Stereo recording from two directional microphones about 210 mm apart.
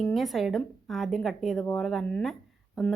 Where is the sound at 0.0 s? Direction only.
Centre (ahead or behind).